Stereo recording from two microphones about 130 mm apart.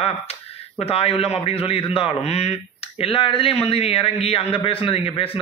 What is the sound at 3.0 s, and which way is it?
A man's voice, 45° left (ahead or behind).